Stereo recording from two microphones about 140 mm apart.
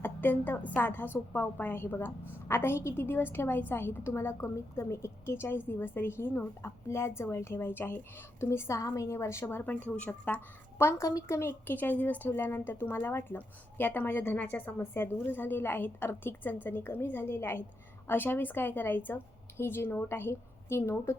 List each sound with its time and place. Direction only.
0.0 s a woman's voice: 15° left (ahead or behind)